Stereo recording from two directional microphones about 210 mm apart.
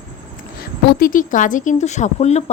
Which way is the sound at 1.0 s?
40° left (ahead or behind).